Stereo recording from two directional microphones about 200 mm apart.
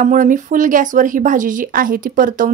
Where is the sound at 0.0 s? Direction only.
40° right (ahead or behind).